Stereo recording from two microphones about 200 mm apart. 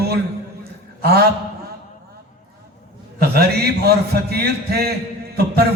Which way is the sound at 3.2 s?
50° right (ahead or behind).